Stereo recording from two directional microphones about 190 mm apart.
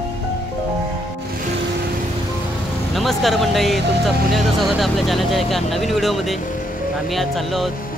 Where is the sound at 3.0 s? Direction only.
Centre (ahead or behind).